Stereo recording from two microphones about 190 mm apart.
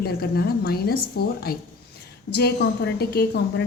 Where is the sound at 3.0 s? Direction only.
55° left (ahead or behind).